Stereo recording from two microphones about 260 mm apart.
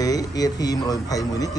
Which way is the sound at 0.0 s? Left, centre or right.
Centre.